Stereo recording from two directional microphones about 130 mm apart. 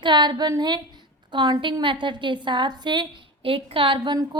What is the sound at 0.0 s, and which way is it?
A woman's voice, 35° right (ahead or behind).